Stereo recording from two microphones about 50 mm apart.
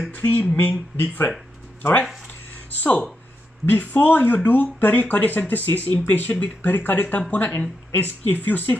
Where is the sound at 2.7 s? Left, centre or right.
Left.